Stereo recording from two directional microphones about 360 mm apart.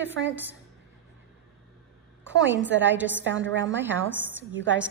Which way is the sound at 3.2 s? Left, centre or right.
Right.